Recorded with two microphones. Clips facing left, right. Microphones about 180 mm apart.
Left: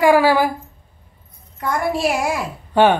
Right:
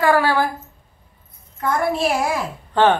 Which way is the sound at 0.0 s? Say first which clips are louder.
Left 4 dB; 10° left (ahead or behind).